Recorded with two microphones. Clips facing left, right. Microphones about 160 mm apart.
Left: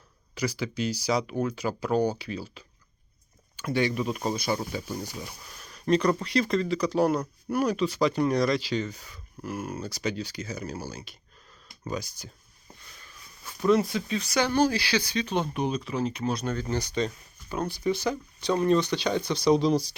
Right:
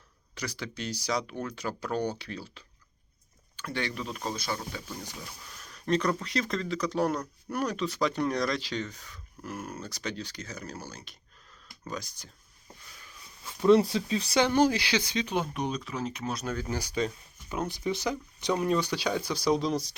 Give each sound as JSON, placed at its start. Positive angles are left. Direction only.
{"t": 0.3, "sound": "speech", "side_deg": 5}
{"t": 5.5, "sound": "speech", "side_deg": 5}
{"t": 13.7, "sound": "speech", "side_deg": -30}
{"t": 15.4, "sound": "speech", "side_deg": 0}
{"t": 17.5, "sound": "speech", "side_deg": -20}